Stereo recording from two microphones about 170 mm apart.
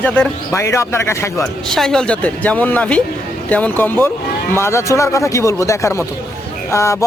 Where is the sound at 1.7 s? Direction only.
5° left (ahead or behind).